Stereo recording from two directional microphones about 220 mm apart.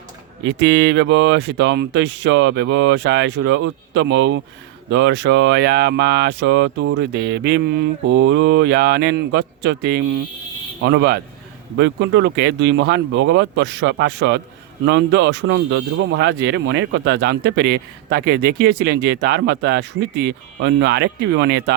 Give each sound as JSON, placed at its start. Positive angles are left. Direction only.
{"t": 0.4, "sound": "speech", "side_deg": -50}